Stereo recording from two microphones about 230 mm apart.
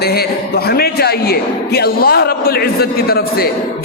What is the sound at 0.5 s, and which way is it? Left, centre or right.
A man's voice, left.